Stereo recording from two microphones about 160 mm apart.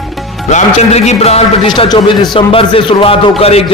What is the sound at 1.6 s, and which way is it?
A man's voice, 30° left (ahead or behind).